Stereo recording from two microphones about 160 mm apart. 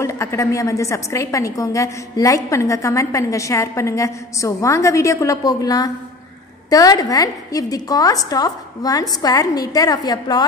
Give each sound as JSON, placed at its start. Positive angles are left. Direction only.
{"t": 0.0, "sound": "a woman's voice", "side_deg": 15}